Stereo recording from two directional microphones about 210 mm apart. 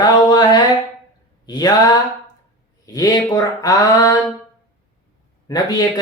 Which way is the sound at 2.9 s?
15° left (ahead or behind).